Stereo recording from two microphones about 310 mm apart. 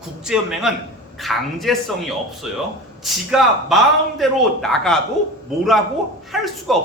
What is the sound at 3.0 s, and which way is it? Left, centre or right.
Speech, centre.